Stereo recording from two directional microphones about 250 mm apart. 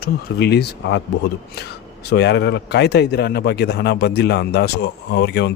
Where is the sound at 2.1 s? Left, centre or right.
Left.